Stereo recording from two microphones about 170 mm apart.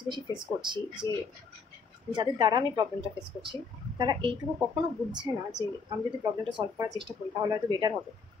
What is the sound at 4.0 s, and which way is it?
Speech, 25° right (ahead or behind).